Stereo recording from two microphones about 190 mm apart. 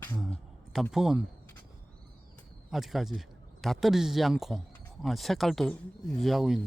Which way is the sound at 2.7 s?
Centre (ahead or behind).